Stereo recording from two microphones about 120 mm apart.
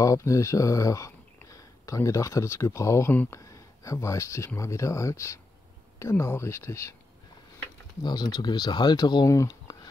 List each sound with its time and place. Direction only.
0.0 s speech: 25° left (ahead or behind)
8.0 s speech: 35° left (ahead or behind)